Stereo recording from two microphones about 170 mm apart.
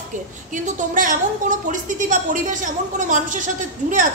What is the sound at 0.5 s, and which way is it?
A woman's voice, 50° right (ahead or behind).